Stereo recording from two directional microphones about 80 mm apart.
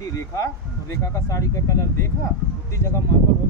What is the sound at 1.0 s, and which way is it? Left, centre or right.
Speech, left.